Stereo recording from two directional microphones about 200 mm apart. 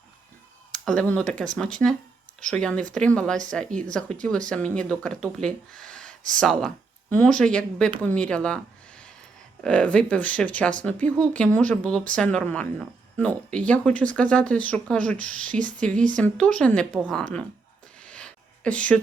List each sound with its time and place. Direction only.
0.9 s speech: 5° left (ahead or behind)
15.4 s speech: 40° right (ahead or behind)
15.8 s speech: 5° left (ahead or behind)
18.0 s a sound: 5° left (ahead or behind)